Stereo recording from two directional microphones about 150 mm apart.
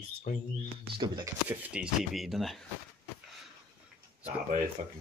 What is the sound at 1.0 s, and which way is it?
Speech, 30° right (ahead or behind).